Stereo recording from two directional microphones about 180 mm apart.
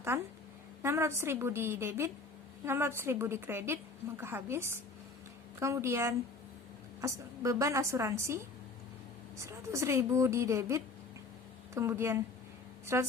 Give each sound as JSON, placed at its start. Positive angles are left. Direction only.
{"t": 0.1, "sound": "a woman's voice", "side_deg": -15}